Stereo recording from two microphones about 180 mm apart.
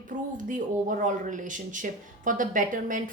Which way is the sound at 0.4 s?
45° right (ahead or behind).